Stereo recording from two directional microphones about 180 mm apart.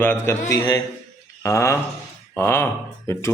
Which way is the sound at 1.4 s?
15° left (ahead or behind).